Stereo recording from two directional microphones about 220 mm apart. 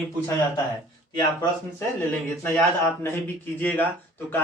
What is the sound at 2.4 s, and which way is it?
A man's voice, 5° left (ahead or behind).